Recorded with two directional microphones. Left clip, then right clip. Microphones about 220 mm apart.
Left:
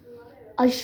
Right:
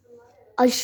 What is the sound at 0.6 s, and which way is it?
Speech, 40° right (ahead or behind).